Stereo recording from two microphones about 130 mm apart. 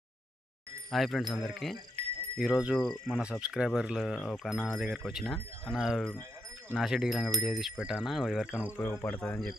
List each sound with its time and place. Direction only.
0.9 s speech: centre (ahead or behind)
8.7 s speech: 20° left (ahead or behind)